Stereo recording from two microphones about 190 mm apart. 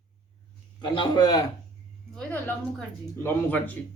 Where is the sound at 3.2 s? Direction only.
10° left (ahead or behind).